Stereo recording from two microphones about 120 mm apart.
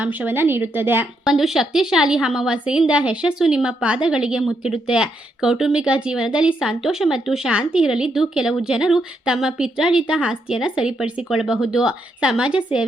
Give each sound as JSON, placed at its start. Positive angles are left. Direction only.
{"t": 0.0, "sound": "a woman's voice", "side_deg": -15}
{"t": 1.2, "sound": "a woman's voice", "side_deg": -5}